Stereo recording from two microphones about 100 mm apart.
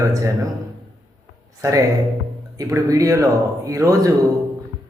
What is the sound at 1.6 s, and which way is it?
A man's voice, 35° right (ahead or behind).